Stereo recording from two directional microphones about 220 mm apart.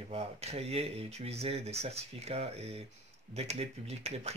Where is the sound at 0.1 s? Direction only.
30° right (ahead or behind).